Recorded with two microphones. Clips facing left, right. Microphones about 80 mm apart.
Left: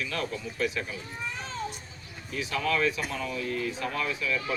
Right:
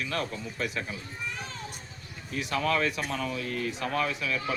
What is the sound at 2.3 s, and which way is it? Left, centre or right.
Speech, right.